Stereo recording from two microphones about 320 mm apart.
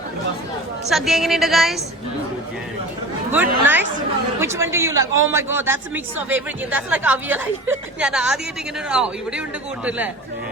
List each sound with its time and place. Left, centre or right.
0.9 s a woman's voice: centre
3.3 s a woman's voice: centre